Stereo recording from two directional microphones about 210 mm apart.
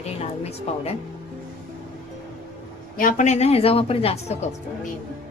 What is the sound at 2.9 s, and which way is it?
A woman's voice, 40° left (ahead or behind).